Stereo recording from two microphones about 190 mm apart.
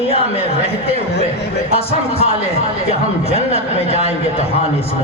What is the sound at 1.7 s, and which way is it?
A man's voice, 30° left (ahead or behind).